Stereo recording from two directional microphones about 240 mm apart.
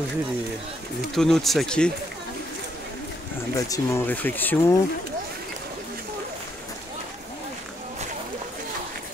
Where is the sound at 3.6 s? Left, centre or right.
Centre.